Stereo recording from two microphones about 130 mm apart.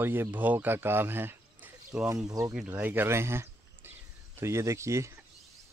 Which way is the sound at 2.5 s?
10° right (ahead or behind).